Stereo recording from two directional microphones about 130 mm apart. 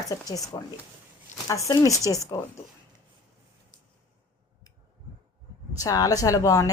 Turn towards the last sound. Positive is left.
turn(degrees=25)  # may be behind; listen again after turning